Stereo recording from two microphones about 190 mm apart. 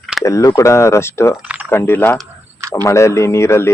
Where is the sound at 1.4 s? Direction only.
5° right (ahead or behind).